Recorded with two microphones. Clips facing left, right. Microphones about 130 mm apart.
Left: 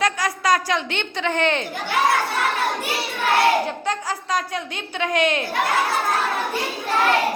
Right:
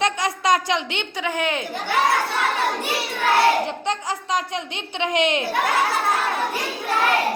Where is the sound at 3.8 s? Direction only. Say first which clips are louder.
Even; 20° right (ahead or behind).